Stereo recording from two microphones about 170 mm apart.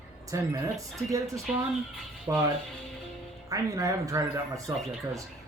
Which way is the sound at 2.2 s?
20° right (ahead or behind).